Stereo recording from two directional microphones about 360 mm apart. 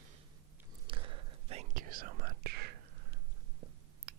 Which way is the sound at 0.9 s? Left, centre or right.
Centre.